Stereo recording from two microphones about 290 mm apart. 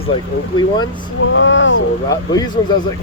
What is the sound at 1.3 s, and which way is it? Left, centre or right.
Speech, left.